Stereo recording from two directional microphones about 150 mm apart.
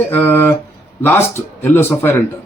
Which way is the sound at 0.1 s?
15° left (ahead or behind).